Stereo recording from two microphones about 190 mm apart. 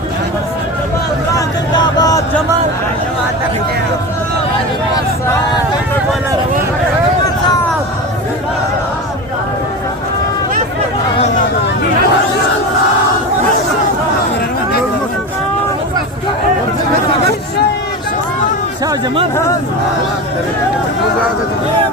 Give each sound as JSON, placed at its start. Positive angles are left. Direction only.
{"t": 1.4, "sound": "vehicle", "side_deg": 20}
{"t": 18.9, "sound": "speech", "side_deg": -30}